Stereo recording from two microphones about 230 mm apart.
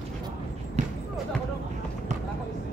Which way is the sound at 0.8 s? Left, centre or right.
Right.